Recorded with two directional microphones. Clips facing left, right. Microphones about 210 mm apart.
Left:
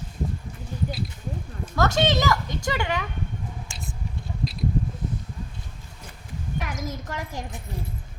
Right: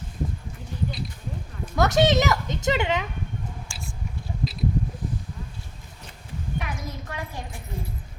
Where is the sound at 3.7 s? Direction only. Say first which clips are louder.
Left 1 dB; 20° left (ahead or behind).